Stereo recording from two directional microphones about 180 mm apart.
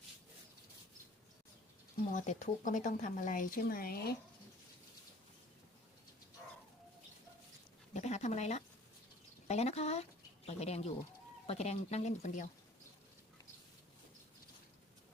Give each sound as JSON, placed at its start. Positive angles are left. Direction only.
{"t": 2.1, "sound": "speech", "side_deg": 45}
{"t": 7.9, "sound": "a sound", "side_deg": 40}
{"t": 9.5, "sound": "speech", "side_deg": 35}